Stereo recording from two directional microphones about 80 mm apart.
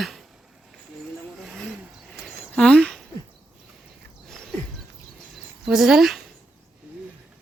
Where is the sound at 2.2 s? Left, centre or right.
Centre.